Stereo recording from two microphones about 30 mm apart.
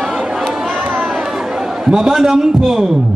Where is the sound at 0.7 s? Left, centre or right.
Right.